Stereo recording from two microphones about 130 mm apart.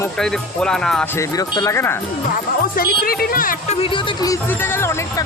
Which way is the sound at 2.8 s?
90° left.